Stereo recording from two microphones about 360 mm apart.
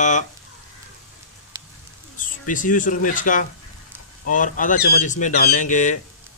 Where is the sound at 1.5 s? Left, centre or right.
Centre.